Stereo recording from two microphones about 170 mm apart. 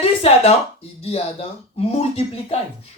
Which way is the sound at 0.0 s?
35° left (ahead or behind).